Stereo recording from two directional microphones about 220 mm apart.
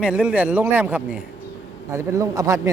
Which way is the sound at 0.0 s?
5° right (ahead or behind).